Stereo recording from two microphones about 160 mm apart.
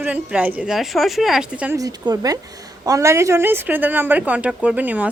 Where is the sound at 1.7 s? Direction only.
20° right (ahead or behind).